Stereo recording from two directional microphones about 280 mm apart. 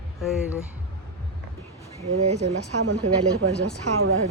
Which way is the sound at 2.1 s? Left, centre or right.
Right.